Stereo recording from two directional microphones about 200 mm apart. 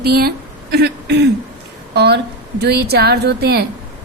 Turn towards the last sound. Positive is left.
turn(degrees=-55)  # may be behind; listen again after turning